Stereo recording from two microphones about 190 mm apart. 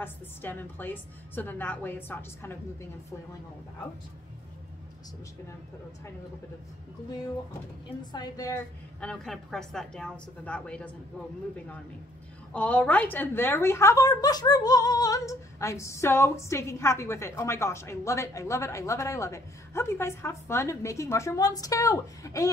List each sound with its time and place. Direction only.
0.0 s a woman's voice: 10° left (ahead or behind)
8.0 s a woman's voice: 20° left (ahead or behind)
9.0 s a woman's voice: 5° left (ahead or behind)
12.5 s a woman's voice: 5° left (ahead or behind)